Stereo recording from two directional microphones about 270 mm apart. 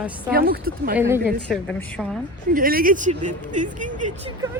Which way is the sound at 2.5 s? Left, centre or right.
Right.